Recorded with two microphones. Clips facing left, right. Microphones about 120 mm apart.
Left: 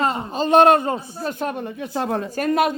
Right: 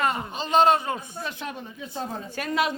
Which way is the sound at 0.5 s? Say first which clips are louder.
Left 6 dB; 60° left (ahead or behind).